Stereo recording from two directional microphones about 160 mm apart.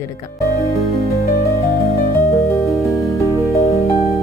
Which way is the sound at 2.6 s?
Centre (ahead or behind).